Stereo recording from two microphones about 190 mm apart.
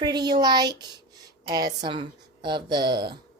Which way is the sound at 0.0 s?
20° right (ahead or behind).